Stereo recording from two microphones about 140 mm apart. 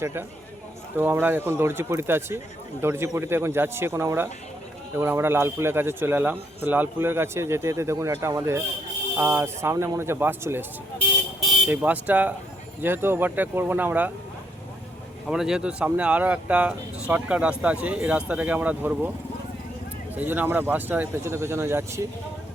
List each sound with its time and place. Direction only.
0.0 s a man's voice: 20° right (ahead or behind)
11.7 s speech: 10° right (ahead or behind)
15.3 s speech: 5° right (ahead or behind)
20.1 s speech: 15° right (ahead or behind)